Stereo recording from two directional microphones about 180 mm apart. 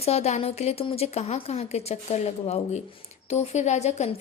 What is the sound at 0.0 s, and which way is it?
Speech, 35° left (ahead or behind).